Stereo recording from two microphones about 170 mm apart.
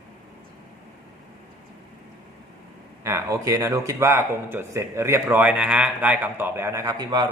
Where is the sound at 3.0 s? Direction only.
15° right (ahead or behind).